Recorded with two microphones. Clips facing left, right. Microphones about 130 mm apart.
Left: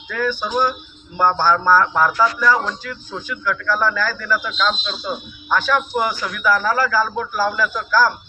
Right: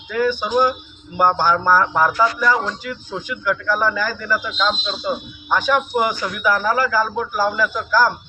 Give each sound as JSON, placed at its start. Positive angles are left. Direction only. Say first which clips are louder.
{"t": 0.1, "sound": "a man's voice", "louder": "right 3 dB", "side_deg": -15}